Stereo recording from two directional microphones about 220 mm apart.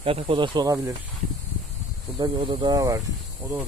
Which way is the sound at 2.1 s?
20° right (ahead or behind).